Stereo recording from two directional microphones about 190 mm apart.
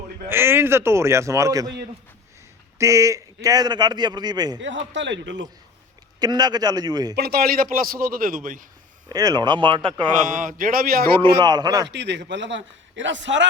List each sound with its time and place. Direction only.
0.3 s a man's voice: 10° right (ahead or behind)
4.9 s a man's voice: 75° right (ahead or behind)
6.1 s a man's voice: 20° right (ahead or behind)
7.2 s a man's voice: 55° right (ahead or behind)
9.0 s a man's voice: 20° right (ahead or behind)
10.2 s a man's voice: 45° right (ahead or behind)
11.3 s a man's voice: 20° right (ahead or behind)
11.9 s a man's voice: 65° right (ahead or behind)